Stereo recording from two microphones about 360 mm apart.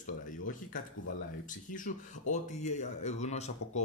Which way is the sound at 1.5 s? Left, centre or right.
Left.